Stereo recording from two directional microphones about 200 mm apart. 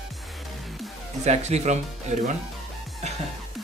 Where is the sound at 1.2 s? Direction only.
35° right (ahead or behind).